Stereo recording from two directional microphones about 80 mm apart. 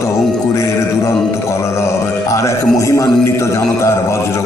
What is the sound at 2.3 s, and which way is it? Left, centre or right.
A man's voice, left.